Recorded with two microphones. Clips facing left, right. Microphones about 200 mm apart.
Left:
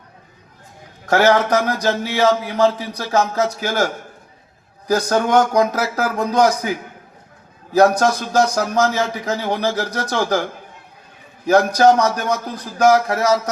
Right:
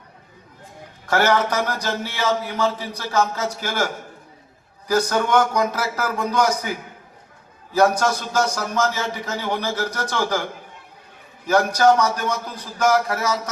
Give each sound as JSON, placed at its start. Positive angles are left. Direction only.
{"t": 1.0, "sound": "a man's voice", "side_deg": 40}
{"t": 11.4, "sound": "a man's voice", "side_deg": 40}